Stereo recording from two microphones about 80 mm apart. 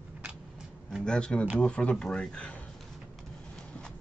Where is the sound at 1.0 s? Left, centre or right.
Centre.